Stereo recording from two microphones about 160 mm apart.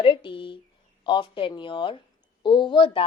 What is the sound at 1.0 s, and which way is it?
A woman's voice, 30° left (ahead or behind).